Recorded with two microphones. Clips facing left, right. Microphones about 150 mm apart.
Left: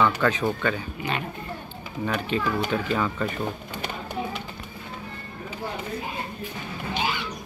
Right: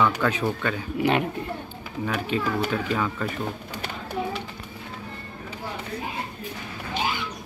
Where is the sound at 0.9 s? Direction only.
65° right (ahead or behind).